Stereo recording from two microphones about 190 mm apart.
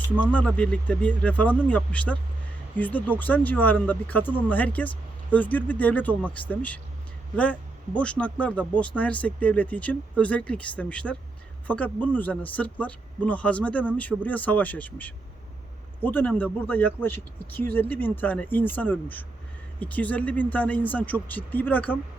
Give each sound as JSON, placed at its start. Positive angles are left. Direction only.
{"t": 0.3, "sound": "speech", "side_deg": 5}